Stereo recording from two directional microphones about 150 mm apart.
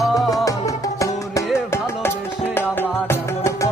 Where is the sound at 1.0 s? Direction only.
20° left (ahead or behind).